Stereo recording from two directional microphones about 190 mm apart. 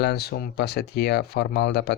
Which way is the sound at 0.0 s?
55° left (ahead or behind).